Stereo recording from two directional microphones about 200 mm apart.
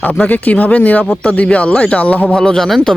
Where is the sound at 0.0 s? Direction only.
10° left (ahead or behind).